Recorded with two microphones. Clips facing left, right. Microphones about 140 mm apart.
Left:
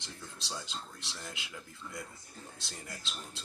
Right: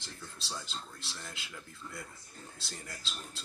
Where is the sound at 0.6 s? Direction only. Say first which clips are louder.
Left 1 dB; 20° left (ahead or behind).